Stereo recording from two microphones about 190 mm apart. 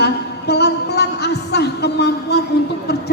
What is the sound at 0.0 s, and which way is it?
A woman's voice, 60° left (ahead or behind).